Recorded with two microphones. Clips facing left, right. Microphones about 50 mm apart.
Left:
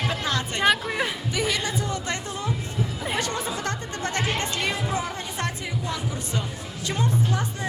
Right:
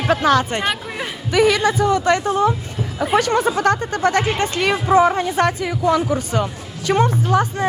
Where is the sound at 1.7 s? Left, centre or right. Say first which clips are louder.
Right 12 dB; right.